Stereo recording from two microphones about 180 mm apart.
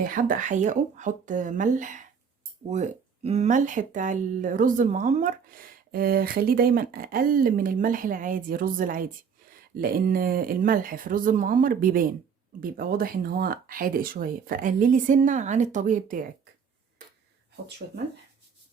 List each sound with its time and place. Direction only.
0.0 s speech: 50° right (ahead or behind)
17.8 s speech: 50° right (ahead or behind)